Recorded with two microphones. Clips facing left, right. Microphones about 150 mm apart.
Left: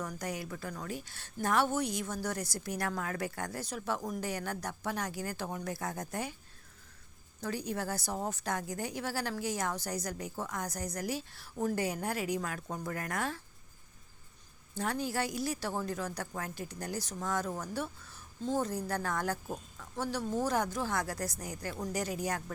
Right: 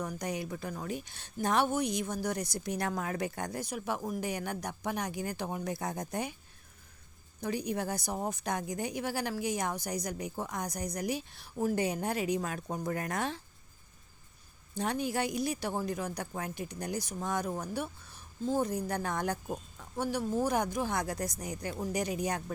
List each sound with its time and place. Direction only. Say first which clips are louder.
0.0 s a woman's voice: right 2 dB; 15° right (ahead or behind)
7.4 s a woman's voice: right 2 dB; 15° right (ahead or behind)
14.8 s a woman's voice: right 2 dB; 20° right (ahead or behind)